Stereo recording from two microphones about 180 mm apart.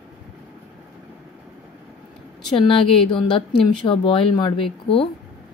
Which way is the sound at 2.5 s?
30° left (ahead or behind).